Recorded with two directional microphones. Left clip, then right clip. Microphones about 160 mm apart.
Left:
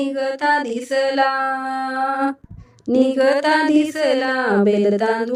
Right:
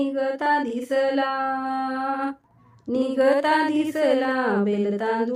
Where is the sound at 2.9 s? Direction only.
40° left (ahead or behind).